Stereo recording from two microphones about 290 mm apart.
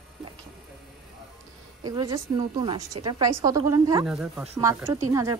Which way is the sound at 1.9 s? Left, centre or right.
Centre.